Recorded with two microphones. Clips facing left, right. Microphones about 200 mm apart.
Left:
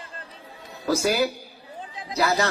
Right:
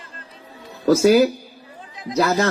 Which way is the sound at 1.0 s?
35° right (ahead or behind).